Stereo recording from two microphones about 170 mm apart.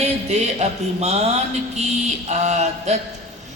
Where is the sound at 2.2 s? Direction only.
40° right (ahead or behind).